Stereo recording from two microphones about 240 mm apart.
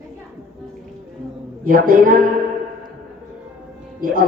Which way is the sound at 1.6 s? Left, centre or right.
Right.